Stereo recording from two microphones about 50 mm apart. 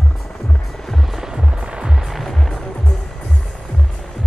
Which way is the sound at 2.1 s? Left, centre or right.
Centre.